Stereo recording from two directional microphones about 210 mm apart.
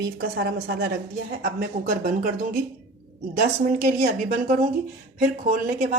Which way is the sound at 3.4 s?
45° right (ahead or behind).